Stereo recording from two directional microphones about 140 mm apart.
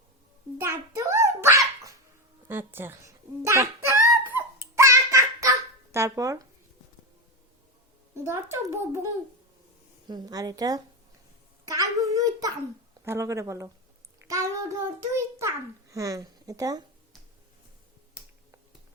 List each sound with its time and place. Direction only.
0.6 s dog: 20° right (ahead or behind)
2.5 s a sound: 15° right (ahead or behind)
8.1 s a child's voice: 20° right (ahead or behind)
11.7 s a sound: 25° right (ahead or behind)
13.1 s a child's voice: 20° right (ahead or behind)
14.3 s child singing: 20° right (ahead or behind)
15.1 s a child's voice: 20° right (ahead or behind)